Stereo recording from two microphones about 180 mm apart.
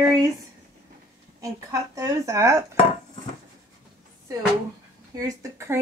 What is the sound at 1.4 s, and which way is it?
Speech, 20° right (ahead or behind).